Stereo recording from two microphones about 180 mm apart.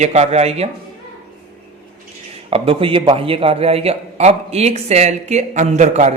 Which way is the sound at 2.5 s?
30° right (ahead or behind).